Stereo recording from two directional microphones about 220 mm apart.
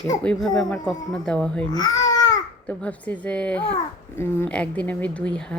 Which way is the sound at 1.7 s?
15° left (ahead or behind).